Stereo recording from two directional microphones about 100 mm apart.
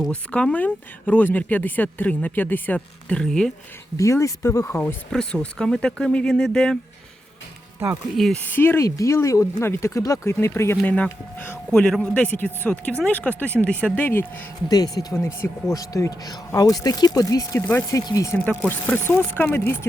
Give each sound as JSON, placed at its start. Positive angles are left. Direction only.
{"t": 0.1, "sound": "speech", "side_deg": 10}
{"t": 3.9, "sound": "speech", "side_deg": 30}
{"t": 4.6, "sound": "speech", "side_deg": 20}
{"t": 5.1, "sound": "speech", "side_deg": 10}
{"t": 8.1, "sound": "speech", "side_deg": 0}
{"t": 8.4, "sound": "speech", "side_deg": 20}
{"t": 10.8, "sound": "speech", "side_deg": 15}
{"t": 11.7, "sound": "speech", "side_deg": 5}
{"t": 12.2, "sound": "speech", "side_deg": 15}
{"t": 14.7, "sound": "speech", "side_deg": 35}
{"t": 15.2, "sound": "speech", "side_deg": 25}
{"t": 18.9, "sound": "speech", "side_deg": 20}